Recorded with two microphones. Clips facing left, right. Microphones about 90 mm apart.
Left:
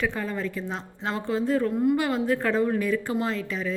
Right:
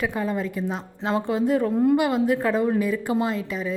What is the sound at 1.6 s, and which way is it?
Speech, 30° right (ahead or behind).